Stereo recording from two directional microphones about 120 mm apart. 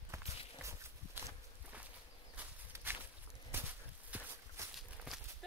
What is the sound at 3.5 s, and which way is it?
Horse, 20° right (ahead or behind).